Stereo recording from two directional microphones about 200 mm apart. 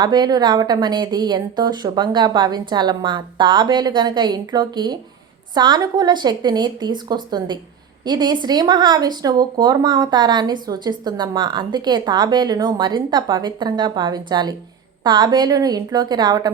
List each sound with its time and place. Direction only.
0.0 s speech: 20° right (ahead or behind)